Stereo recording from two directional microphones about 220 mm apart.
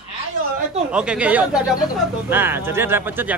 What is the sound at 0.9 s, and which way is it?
Speech, 5° right (ahead or behind).